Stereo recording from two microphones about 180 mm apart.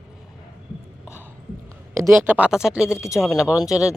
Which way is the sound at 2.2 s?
10° right (ahead or behind).